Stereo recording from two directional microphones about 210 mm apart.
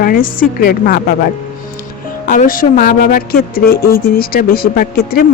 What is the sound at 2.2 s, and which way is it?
Speech, 40° left (ahead or behind).